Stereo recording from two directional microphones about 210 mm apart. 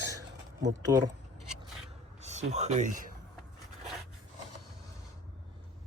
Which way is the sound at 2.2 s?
30° right (ahead or behind).